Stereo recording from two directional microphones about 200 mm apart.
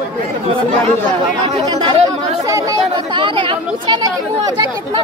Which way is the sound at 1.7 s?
25° right (ahead or behind).